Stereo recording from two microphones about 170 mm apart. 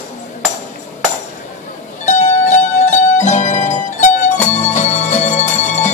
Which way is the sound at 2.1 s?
45° left (ahead or behind).